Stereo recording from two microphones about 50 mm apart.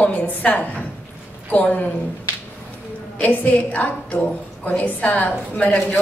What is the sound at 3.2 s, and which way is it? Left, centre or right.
A woman's voice, left.